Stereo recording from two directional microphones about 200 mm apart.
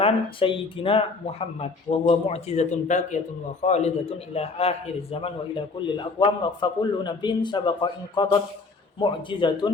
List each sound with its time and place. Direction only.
0.0 s a man's voice: 25° left (ahead or behind)